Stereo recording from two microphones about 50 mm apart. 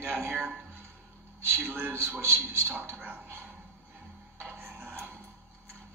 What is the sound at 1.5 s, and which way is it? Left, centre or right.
A man's voice, right.